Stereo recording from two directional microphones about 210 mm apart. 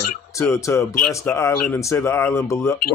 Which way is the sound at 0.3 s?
15° left (ahead or behind).